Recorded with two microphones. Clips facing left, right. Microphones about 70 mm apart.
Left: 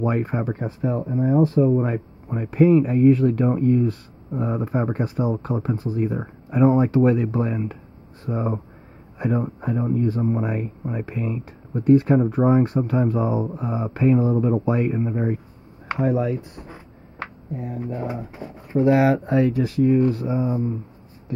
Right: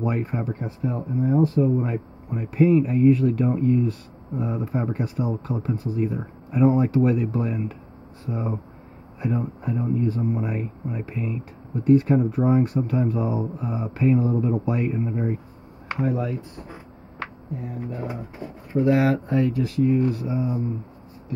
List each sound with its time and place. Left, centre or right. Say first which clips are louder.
0.0 s speech: left 3 dB; left
1.2 s speech: left 2 dB; left
1.6 s speech: left 3 dB; left
19.9 s speech: left 3 dB; left